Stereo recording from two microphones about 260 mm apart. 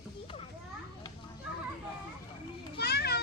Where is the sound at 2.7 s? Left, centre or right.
Left.